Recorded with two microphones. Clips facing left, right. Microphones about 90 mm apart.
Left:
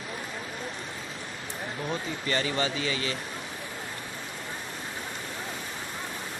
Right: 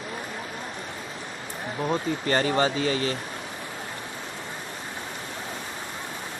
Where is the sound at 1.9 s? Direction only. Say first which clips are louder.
Right 6 dB; 40° right (ahead or behind).